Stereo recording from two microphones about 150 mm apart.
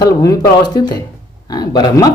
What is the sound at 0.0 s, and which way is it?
Speech, 20° left (ahead or behind).